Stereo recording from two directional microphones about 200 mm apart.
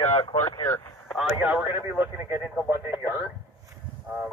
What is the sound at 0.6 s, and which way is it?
Speech, 10° left (ahead or behind).